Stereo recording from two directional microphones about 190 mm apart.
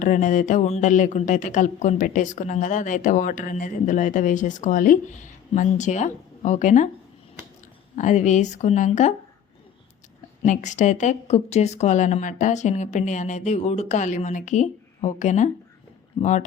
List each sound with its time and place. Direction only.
0.0 s speech: 45° left (ahead or behind)
7.9 s speech: 40° left (ahead or behind)
10.4 s speech: 40° left (ahead or behind)